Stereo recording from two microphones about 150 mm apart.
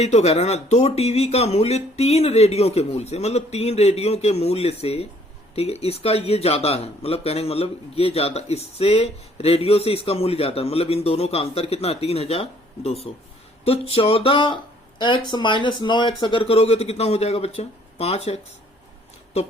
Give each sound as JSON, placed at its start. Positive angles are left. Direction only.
{"t": 0.0, "sound": "speech", "side_deg": 45}